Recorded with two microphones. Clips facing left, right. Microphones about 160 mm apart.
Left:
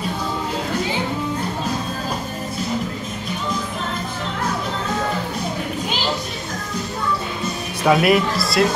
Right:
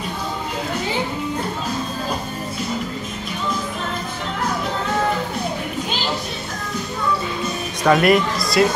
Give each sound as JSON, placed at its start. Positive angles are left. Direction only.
{"t": 7.8, "sound": "speech", "side_deg": 5}